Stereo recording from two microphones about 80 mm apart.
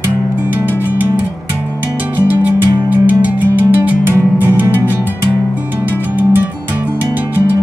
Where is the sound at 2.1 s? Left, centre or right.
Right.